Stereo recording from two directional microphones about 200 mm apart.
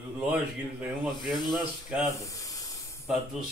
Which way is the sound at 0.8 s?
Centre (ahead or behind).